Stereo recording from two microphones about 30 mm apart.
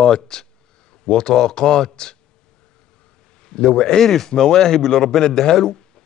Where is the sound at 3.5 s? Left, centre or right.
Left.